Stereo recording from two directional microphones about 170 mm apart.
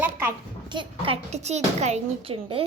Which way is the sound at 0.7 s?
30° right (ahead or behind).